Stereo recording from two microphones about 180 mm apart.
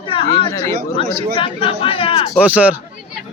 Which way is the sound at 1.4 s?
30° left (ahead or behind).